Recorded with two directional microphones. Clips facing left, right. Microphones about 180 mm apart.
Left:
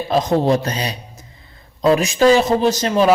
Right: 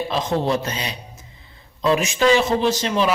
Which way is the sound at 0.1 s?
40° left (ahead or behind).